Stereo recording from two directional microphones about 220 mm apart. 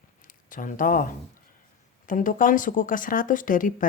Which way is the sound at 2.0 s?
35° left (ahead or behind).